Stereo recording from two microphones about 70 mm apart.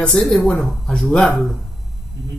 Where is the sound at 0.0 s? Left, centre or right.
Centre.